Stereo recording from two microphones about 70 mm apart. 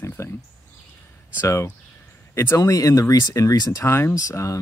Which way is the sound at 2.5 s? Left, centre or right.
Left.